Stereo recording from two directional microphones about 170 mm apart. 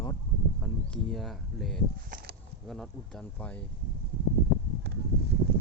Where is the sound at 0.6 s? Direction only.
5° left (ahead or behind).